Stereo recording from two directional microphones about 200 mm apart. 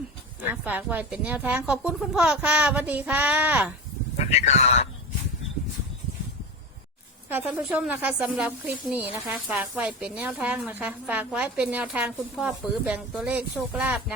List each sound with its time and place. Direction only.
0.5 s speech: 5° right (ahead or behind)
4.2 s speech: 35° left (ahead or behind)
7.3 s speech: 10° right (ahead or behind)